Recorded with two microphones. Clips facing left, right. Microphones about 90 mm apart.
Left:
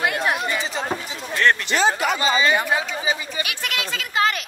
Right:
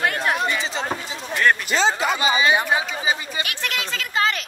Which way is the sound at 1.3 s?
10° right (ahead or behind).